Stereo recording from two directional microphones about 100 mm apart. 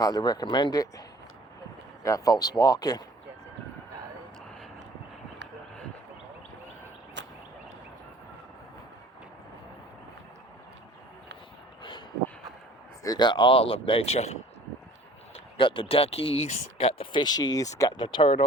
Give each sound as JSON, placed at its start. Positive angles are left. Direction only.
{"t": 0.0, "sound": "speech", "side_deg": 45}
{"t": 2.0, "sound": "speech", "side_deg": 35}
{"t": 11.8, "sound": "a sound", "side_deg": 50}
{"t": 13.0, "sound": "speech", "side_deg": 45}
{"t": 15.5, "sound": "speech", "side_deg": 60}
{"t": 17.9, "sound": "speech", "side_deg": 55}